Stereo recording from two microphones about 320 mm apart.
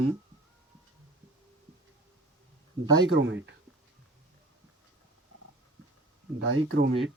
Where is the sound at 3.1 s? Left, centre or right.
Right.